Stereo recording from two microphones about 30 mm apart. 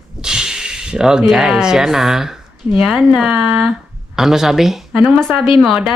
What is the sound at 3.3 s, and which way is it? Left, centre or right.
Speech, right.